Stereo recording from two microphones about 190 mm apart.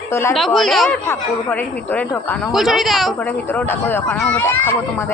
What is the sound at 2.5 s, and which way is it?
Speech, centre (ahead or behind).